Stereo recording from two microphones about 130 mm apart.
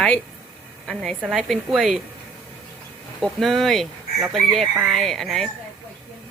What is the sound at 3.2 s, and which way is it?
A woman's voice, centre (ahead or behind).